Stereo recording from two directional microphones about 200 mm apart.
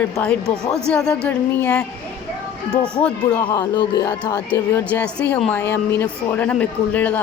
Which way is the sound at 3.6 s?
20° left (ahead or behind).